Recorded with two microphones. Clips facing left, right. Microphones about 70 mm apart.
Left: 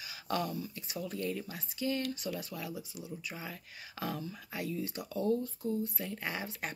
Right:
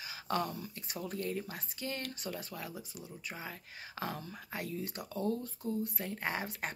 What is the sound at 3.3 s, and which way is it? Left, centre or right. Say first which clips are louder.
Speech: left 1 dB; right.